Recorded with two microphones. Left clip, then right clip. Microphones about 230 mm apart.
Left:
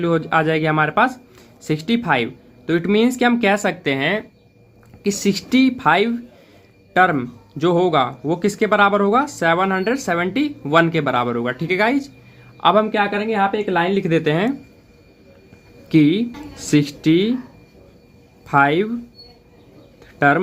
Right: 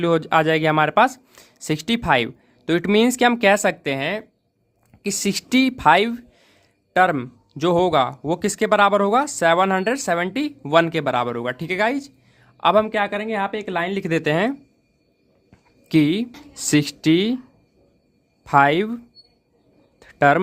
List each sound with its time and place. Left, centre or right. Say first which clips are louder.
0.0 s speech: even; right
15.9 s speech: left 3 dB; right
18.4 s speech: even; right
20.0 s bird: even; right